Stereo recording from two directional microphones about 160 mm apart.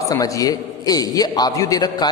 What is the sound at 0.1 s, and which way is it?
A man's voice, 20° left (ahead or behind).